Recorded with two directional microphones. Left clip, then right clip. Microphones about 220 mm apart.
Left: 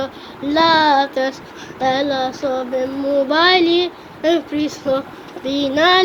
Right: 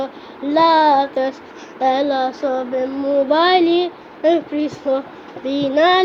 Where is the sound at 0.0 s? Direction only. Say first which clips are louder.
Even; 20° left (ahead or behind).